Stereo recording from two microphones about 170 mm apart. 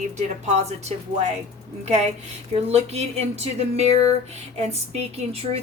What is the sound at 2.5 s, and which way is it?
Speech, 40° right (ahead or behind).